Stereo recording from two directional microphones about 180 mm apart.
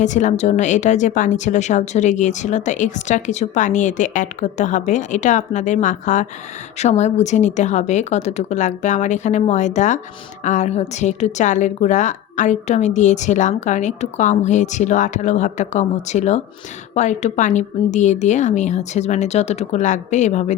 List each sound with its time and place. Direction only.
0.0 s a woman's voice: 40° left (ahead or behind)